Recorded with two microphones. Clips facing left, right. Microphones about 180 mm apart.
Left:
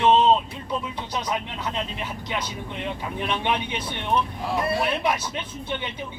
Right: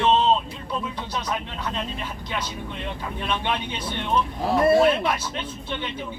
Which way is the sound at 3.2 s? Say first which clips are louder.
Left 1 dB; 15° left (ahead or behind).